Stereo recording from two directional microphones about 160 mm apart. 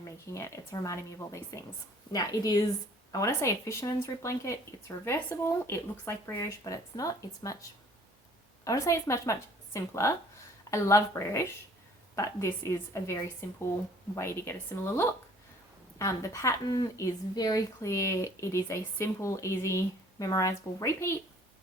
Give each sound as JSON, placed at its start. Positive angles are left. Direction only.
{"t": 0.3, "sound": "a woman's voice", "side_deg": 20}
{"t": 8.6, "sound": "a woman's voice", "side_deg": 20}
{"t": 16.0, "sound": "a woman's voice", "side_deg": 20}